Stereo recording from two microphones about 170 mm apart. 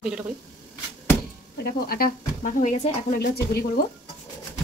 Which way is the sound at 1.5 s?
60° left (ahead or behind).